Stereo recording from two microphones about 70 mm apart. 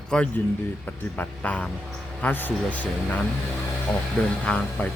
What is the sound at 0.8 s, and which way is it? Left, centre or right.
Speech, left.